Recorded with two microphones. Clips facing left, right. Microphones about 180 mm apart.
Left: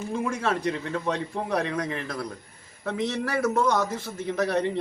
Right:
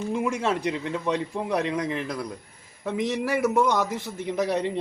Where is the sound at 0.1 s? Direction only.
15° right (ahead or behind).